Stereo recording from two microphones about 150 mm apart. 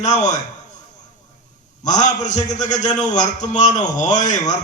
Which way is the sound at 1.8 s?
55° left (ahead or behind).